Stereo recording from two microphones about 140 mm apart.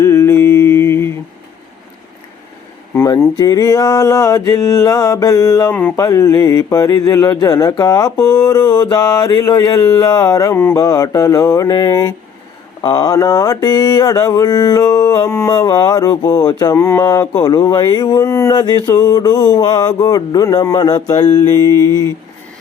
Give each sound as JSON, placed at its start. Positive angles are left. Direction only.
{"t": 0.0, "sound": "mantra", "side_deg": 20}
{"t": 2.9, "sound": "mantra", "side_deg": 20}